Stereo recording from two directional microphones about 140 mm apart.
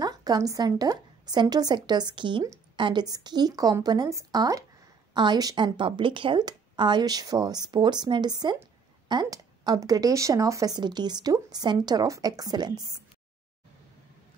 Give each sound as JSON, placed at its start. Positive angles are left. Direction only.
{"t": 0.0, "sound": "a woman's voice", "side_deg": -30}